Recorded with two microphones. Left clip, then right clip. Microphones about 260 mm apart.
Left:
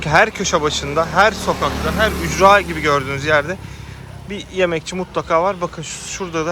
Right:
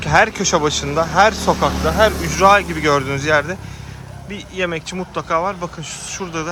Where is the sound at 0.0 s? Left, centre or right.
Centre.